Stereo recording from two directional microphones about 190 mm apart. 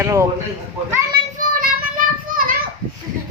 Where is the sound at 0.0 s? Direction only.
15° right (ahead or behind).